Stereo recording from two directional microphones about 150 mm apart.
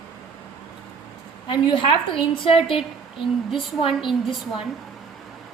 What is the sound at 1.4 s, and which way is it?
A woman's voice, 35° left (ahead or behind).